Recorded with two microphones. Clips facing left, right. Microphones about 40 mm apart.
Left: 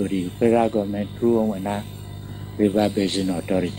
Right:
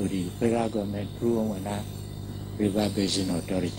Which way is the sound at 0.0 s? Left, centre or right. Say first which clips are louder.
Left 6 dB; left.